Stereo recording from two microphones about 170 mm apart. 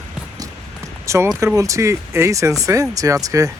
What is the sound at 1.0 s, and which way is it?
Speech, 15° right (ahead or behind).